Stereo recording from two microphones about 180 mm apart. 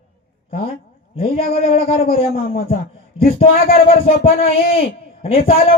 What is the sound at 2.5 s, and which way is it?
Speech, 55° left (ahead or behind).